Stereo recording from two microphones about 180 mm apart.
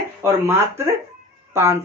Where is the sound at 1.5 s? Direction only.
15° right (ahead or behind).